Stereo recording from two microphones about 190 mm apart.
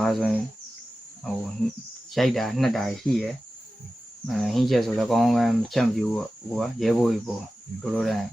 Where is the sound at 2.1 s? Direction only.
Centre (ahead or behind).